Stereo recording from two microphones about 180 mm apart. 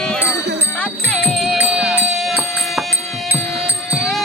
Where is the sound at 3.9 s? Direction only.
Centre (ahead or behind).